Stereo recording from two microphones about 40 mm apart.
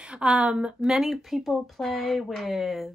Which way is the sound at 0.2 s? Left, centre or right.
Right.